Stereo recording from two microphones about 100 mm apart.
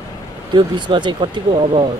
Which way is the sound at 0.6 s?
50° right (ahead or behind).